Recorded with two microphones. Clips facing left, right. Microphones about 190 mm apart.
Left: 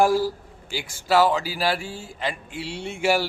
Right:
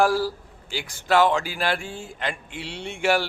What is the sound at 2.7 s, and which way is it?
Speech, 5° left (ahead or behind).